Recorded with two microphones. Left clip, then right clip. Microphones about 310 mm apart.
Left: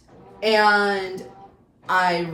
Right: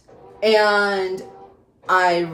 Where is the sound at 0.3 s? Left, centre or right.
Centre.